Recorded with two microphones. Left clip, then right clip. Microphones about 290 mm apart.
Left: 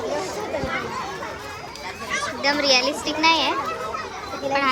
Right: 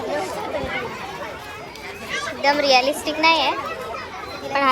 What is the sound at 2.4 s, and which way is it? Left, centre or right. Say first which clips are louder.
A child's voice: right 3 dB; centre.